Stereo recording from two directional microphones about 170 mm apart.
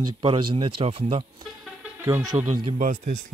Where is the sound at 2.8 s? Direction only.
50° right (ahead or behind).